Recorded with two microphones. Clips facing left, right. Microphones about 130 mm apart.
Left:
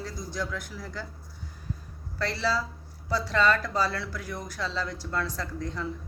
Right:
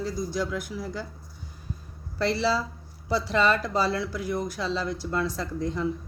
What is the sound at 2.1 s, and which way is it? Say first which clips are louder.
Speech: right 4 dB; 20° right (ahead or behind).